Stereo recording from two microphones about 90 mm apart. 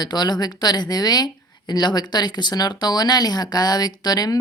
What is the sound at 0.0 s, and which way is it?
Speech, 50° left (ahead or behind).